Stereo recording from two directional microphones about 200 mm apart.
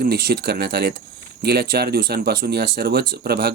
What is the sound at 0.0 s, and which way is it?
Speech, 50° right (ahead or behind).